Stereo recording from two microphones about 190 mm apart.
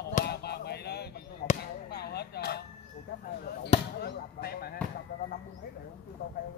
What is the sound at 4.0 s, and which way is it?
Speech, 55° left (ahead or behind).